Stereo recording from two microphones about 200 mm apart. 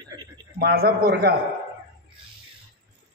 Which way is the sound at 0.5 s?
50° right (ahead or behind).